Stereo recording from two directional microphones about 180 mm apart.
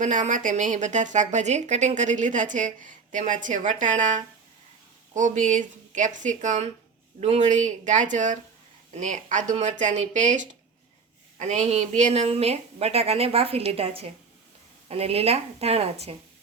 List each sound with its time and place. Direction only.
0.0 s a woman's voice: 45° right (ahead or behind)